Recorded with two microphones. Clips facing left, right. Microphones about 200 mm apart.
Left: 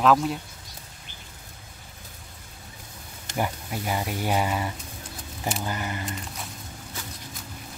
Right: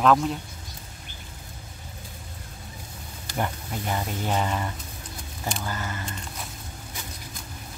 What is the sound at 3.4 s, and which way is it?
Speech, 5° left (ahead or behind).